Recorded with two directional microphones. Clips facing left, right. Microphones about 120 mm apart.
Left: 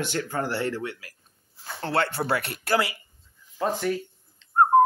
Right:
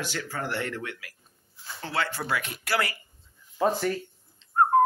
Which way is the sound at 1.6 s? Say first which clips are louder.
Left 5 dB; 55° left (ahead or behind).